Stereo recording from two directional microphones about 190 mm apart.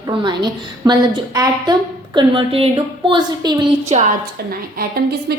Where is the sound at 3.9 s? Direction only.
40° right (ahead or behind).